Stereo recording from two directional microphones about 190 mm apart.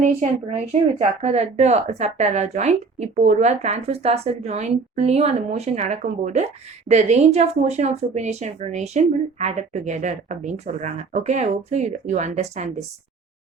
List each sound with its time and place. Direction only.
0.0 s speech: 40° right (ahead or behind)